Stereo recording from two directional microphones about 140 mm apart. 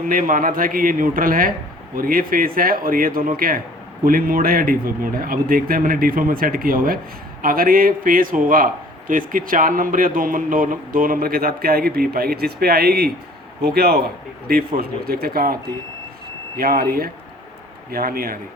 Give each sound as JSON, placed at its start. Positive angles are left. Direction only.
{"t": 0.1, "sound": "a man's voice", "side_deg": -80}
{"t": 16.6, "sound": "a man's voice", "side_deg": -90}